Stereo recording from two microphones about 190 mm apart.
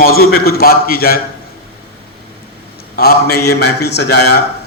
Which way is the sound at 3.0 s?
55° left (ahead or behind).